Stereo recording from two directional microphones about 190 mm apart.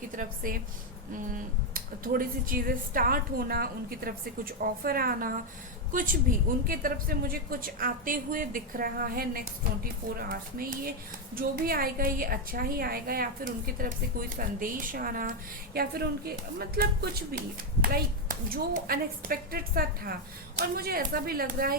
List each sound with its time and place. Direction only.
0.2 s a woman's voice: 45° right (ahead or behind)